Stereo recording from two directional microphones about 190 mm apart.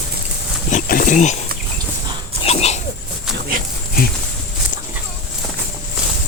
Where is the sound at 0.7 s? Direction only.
45° left (ahead or behind).